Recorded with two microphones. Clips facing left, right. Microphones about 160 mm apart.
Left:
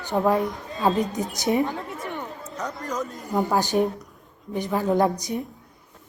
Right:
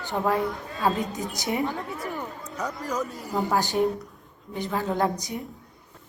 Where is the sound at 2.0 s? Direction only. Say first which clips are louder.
Even; 5° right (ahead or behind).